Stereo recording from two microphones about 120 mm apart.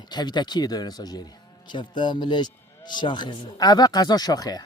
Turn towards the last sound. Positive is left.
turn(degrees=35)  # may be behind; listen again after turning